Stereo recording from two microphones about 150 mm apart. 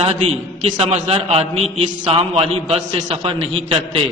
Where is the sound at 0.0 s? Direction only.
45° right (ahead or behind).